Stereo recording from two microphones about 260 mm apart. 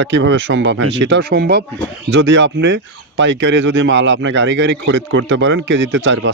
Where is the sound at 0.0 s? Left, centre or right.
Right.